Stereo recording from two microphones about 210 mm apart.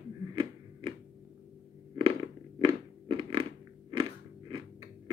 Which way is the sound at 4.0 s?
20° right (ahead or behind).